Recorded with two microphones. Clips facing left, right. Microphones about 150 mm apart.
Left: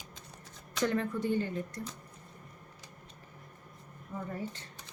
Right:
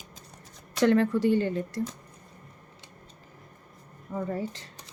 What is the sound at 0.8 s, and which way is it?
Speech, 85° right.